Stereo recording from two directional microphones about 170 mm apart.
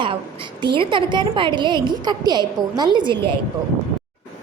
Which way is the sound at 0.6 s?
30° right (ahead or behind).